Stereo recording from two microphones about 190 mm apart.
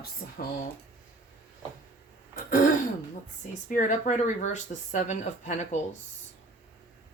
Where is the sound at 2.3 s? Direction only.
45° left (ahead or behind).